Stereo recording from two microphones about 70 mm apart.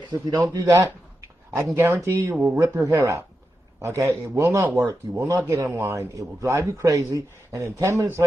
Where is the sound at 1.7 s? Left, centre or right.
Right.